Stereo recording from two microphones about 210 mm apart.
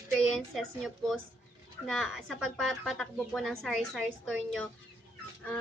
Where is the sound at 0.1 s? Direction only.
Centre (ahead or behind).